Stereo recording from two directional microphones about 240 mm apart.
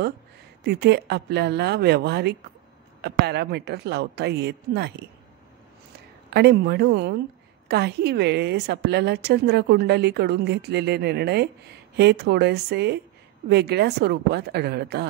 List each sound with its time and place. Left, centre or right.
0.7 s a woman's voice: right
6.3 s a woman's voice: right